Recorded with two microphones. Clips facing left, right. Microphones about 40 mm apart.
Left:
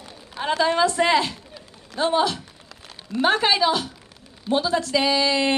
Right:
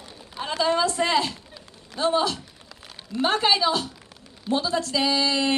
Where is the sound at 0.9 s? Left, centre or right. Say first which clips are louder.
Left 3 dB; left.